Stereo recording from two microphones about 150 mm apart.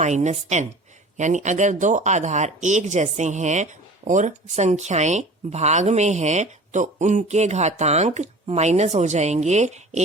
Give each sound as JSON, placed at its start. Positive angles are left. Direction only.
{"t": 0.0, "sound": "speech", "side_deg": -50}